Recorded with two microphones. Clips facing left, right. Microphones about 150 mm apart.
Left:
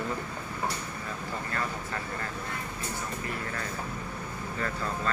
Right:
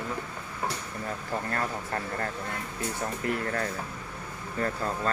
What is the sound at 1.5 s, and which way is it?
Speech, 50° right (ahead or behind).